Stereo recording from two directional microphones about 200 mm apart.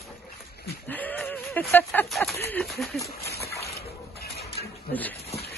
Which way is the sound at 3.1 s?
50° left (ahead or behind).